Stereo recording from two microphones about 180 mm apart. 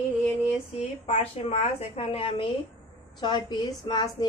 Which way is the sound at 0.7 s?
35° left (ahead or behind).